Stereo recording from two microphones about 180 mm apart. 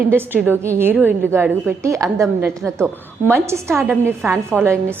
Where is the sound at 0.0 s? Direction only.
10° right (ahead or behind).